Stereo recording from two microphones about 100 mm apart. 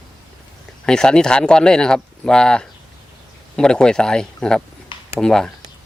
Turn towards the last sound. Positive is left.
turn(degrees=5)  # may be behind; listen again after turning